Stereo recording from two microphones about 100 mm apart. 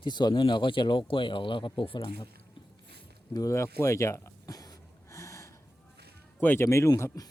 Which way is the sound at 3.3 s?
30° left (ahead or behind).